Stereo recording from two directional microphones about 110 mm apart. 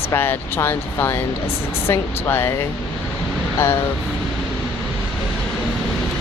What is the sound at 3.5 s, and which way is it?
Speech, 20° left (ahead or behind).